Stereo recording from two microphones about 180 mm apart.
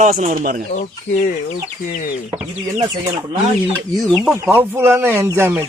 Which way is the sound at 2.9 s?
30° right (ahead or behind).